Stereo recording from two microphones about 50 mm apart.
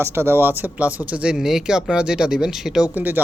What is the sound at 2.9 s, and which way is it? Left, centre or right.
Speech, right.